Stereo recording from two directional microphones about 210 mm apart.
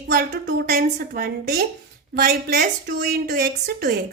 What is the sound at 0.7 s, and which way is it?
A woman's voice, 45° right (ahead or behind).